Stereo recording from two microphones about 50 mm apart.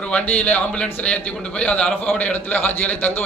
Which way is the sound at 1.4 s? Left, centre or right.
Left.